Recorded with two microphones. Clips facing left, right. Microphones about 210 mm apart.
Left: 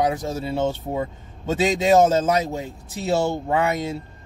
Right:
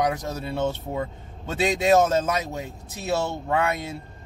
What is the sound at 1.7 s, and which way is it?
Speech, 30° left (ahead or behind).